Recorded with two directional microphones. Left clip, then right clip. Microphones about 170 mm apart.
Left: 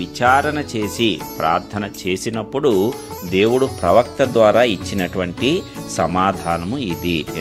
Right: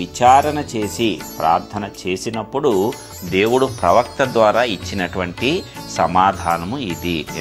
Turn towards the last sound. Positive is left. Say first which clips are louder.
# left 1 dB
turn(degrees=45)  # may be behind; listen again after turning